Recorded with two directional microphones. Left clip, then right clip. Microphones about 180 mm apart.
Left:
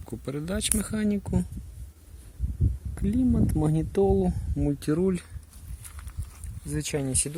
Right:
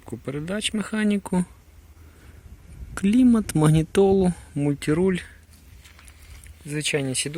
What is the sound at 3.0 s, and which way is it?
Speech, 25° right (ahead or behind).